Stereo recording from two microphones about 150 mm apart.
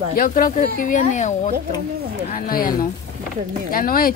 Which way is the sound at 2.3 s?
65° left (ahead or behind).